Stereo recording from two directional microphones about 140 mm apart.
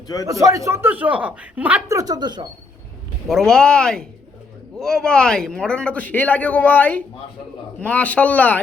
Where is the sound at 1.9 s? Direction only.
25° right (ahead or behind).